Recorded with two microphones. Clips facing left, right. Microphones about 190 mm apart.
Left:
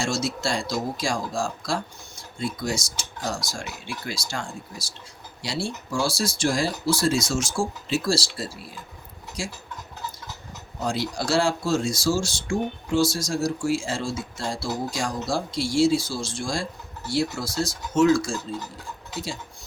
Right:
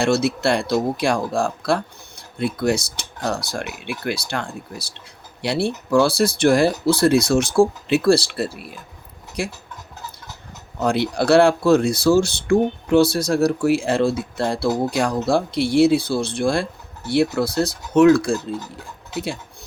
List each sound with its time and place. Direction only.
0.0 s speech: 60° right (ahead or behind)
10.8 s speech: 60° right (ahead or behind)